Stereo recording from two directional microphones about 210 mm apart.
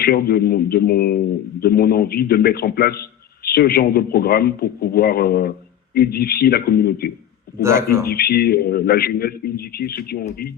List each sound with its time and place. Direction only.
0.0 s a man's voice: 45° left (ahead or behind)
7.6 s speech: 15° right (ahead or behind)
8.0 s a man's voice: 45° left (ahead or behind)